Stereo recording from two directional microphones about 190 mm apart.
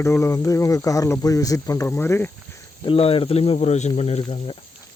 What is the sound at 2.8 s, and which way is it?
Speech, 30° left (ahead or behind).